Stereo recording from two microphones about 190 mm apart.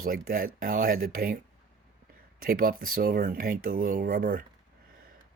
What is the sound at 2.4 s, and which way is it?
Speech, 50° right (ahead or behind).